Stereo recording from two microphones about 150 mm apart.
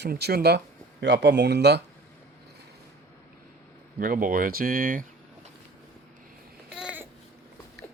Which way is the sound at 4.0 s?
65° right (ahead or behind).